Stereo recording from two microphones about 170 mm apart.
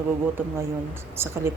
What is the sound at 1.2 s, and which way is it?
Speech, 15° right (ahead or behind).